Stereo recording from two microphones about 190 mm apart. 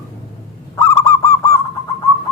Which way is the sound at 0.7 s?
15° left (ahead or behind).